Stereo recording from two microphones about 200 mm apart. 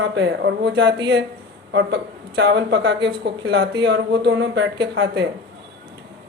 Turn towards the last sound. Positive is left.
turn(degrees=-60)  # may be behind; listen again after turning